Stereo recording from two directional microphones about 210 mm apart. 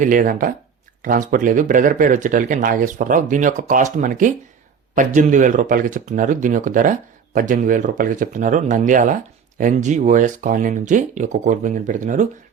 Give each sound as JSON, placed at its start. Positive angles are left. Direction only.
{"t": 0.0, "sound": "speech", "side_deg": -40}